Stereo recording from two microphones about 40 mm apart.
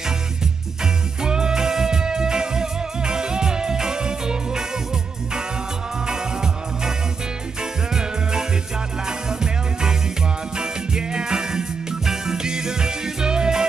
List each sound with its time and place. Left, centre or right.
1.2 s music: centre
6.0 s music: centre
7.9 s music: centre